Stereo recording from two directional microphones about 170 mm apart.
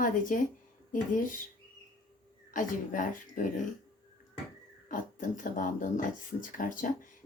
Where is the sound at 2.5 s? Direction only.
50° left (ahead or behind).